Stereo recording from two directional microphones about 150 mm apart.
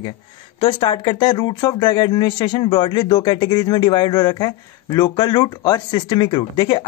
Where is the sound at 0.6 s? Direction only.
35° left (ahead or behind).